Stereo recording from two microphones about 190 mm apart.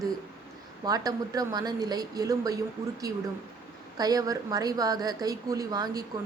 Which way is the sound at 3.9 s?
20° right (ahead or behind).